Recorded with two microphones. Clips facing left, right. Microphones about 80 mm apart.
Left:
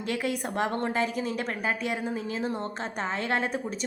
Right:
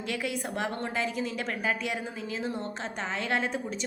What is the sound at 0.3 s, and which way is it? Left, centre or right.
A woman's voice, left.